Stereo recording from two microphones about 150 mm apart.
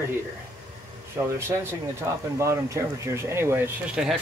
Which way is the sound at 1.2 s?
15° right (ahead or behind).